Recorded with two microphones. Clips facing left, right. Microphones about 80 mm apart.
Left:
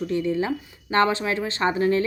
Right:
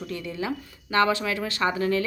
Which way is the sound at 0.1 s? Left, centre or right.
Left.